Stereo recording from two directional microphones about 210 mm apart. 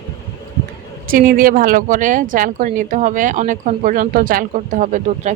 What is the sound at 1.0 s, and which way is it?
Speech, 40° right (ahead or behind).